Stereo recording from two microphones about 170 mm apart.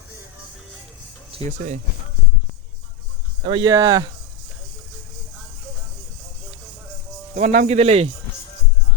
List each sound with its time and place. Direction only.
1.3 s speech: 40° right (ahead or behind)
3.4 s speech: 25° right (ahead or behind)
7.3 s speech: 50° right (ahead or behind)